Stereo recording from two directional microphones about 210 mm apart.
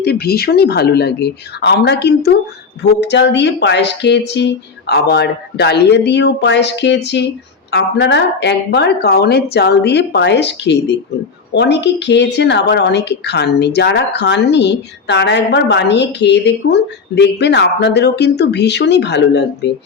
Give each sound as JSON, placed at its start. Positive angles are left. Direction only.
{"t": 0.0, "sound": "a woman's voice", "side_deg": 50}